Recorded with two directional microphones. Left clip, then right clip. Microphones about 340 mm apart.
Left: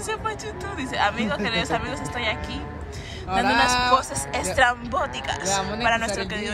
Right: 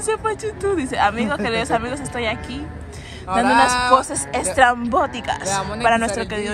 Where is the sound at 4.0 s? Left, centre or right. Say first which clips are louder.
Right 4 dB; centre.